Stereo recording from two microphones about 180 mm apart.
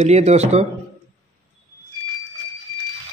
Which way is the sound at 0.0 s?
35° right (ahead or behind).